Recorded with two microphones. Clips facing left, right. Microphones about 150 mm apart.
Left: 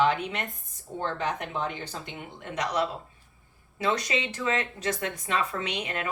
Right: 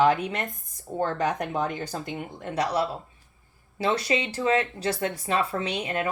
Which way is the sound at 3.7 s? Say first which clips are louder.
Right 3 dB; 30° right (ahead or behind).